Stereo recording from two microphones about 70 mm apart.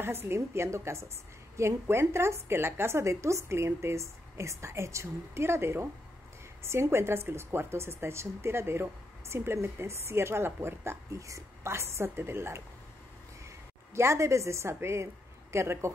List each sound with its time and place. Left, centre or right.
0.0 s speech: right
11.1 s speech: right
13.9 s a woman's voice: right